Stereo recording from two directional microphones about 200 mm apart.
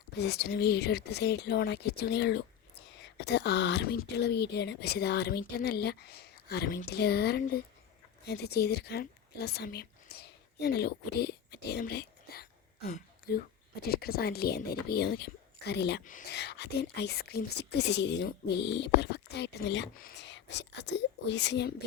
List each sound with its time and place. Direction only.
0.1 s speech: 55° left (ahead or behind)